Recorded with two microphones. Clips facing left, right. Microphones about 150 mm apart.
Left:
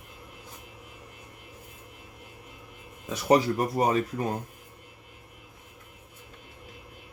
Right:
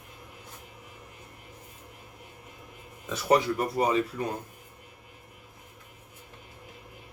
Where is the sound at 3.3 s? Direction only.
40° left (ahead or behind).